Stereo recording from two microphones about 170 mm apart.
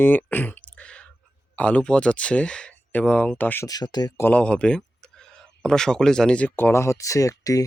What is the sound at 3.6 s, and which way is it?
Speech, 25° left (ahead or behind).